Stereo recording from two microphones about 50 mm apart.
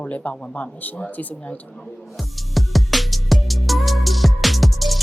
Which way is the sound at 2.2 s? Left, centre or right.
Centre.